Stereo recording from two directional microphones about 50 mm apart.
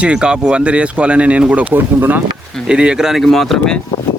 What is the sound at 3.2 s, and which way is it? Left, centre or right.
Speech, centre.